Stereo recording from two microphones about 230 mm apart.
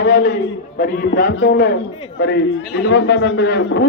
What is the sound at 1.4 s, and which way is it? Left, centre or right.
Speech, left.